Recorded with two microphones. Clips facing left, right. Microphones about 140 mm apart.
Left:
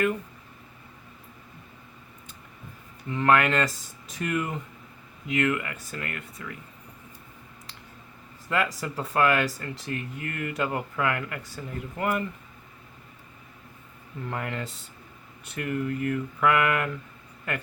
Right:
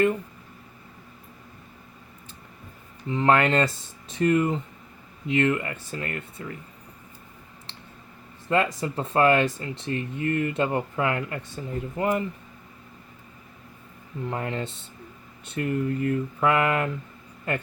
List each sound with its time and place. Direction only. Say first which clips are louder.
3.1 s speech: right 2 dB; 25° right (ahead or behind)
8.4 s speech: right 4 dB; 30° right (ahead or behind)
14.3 s speech: right 3 dB; 25° right (ahead or behind)